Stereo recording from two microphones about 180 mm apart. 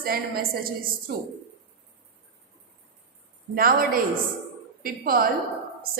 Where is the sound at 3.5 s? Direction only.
55° right (ahead or behind).